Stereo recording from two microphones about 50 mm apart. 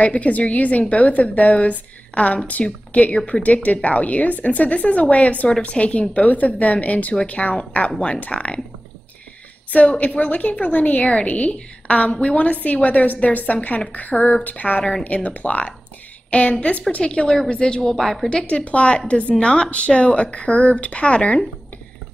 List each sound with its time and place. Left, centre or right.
0.0 s a woman's voice: left
9.7 s a woman's voice: left; by 18.3 s centre
18.3 s a woman's voice: left